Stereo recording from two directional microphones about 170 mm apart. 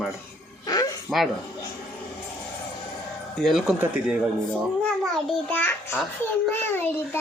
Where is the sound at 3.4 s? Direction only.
Centre (ahead or behind).